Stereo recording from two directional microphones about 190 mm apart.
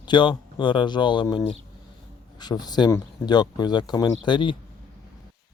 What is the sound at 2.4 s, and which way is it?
Speech, 20° left (ahead or behind).